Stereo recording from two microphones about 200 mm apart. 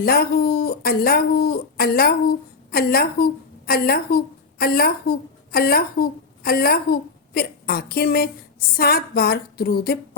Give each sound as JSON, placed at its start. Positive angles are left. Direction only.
{"t": 0.0, "sound": "a woman's voice", "side_deg": 50}